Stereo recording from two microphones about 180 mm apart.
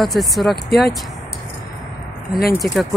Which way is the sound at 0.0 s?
Centre (ahead or behind).